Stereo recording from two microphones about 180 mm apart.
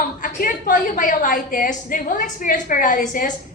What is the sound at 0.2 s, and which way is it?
A woman's voice, 50° left (ahead or behind).